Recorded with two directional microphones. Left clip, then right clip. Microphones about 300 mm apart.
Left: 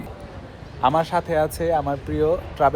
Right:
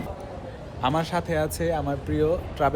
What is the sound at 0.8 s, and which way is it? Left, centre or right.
Speech, centre.